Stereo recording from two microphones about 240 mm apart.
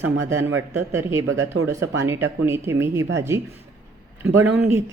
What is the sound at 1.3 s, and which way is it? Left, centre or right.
Speech, right.